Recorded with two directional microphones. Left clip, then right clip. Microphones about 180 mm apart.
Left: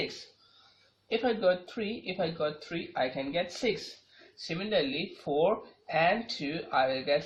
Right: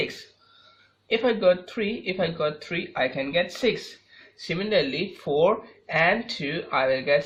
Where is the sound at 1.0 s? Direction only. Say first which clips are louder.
Right 7 dB; 40° right (ahead or behind).